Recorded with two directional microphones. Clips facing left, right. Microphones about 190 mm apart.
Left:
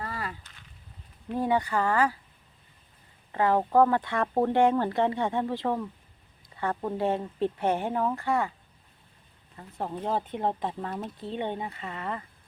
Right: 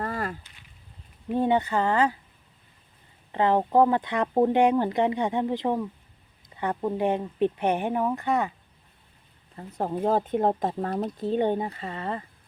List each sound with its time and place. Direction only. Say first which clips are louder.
0.0 s a sound: right 5 dB; 50° right (ahead or behind)
1.4 s speech: right 3 dB; 25° right (ahead or behind)
3.3 s speech: right 1 dB; 20° right (ahead or behind)
9.6 s speech: right 6 dB; 40° right (ahead or behind)